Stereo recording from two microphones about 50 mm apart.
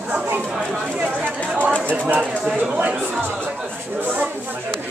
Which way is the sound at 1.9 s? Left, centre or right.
Right.